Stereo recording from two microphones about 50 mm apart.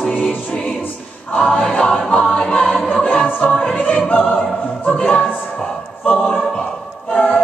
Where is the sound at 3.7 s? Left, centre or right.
Left.